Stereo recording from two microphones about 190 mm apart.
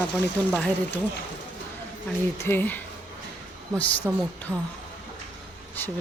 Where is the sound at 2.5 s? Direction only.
10° left (ahead or behind).